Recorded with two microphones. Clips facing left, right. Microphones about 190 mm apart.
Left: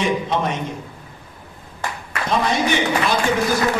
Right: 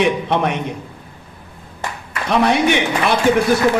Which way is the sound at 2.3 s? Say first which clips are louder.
Right 5 dB; 65° right (ahead or behind).